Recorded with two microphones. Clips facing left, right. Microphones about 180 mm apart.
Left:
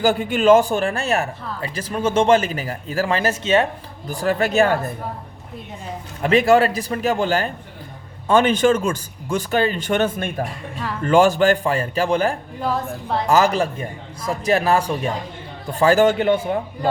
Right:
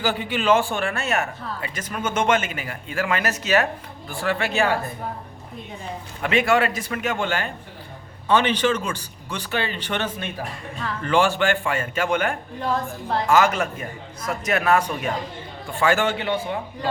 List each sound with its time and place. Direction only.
0.0 s speech: 45° left (ahead or behind); by 3.7 s 25° left (ahead or behind)
4.1 s speech: 40° left (ahead or behind)
6.2 s speech: 35° left (ahead or behind)